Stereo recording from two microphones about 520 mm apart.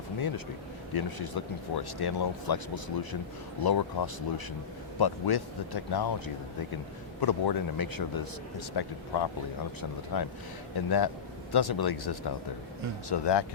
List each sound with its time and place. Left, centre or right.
0.9 s a man's voice: left